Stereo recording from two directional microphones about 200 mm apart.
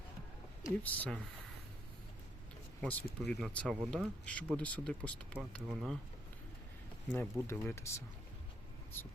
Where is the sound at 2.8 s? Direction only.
5° left (ahead or behind).